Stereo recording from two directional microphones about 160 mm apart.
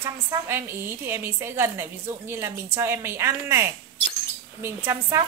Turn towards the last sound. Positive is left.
turn(degrees=-20)  # may be behind; listen again after turning